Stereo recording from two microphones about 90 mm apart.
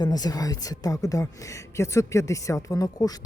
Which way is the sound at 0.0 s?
45° left (ahead or behind).